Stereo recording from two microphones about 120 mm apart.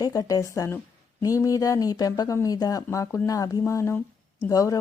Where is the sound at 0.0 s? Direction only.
30° left (ahead or behind).